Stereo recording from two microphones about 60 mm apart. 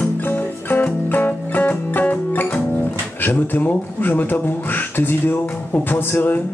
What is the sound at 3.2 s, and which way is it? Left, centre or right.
Speech, left.